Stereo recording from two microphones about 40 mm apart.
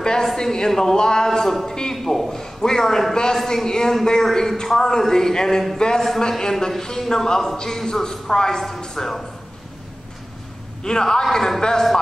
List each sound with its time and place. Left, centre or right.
0.0 s a man's voice: centre
2.0 s a sound: centre
2.4 s a man's voice: centre
10.8 s a man's voice: centre